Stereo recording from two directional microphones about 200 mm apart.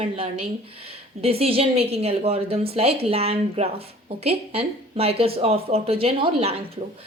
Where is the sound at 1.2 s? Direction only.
30° right (ahead or behind).